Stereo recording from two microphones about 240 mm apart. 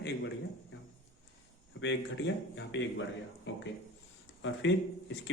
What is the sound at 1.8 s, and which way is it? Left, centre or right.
Speech, left.